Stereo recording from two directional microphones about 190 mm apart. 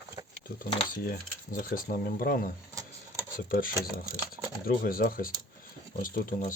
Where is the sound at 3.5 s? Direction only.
50° left (ahead or behind).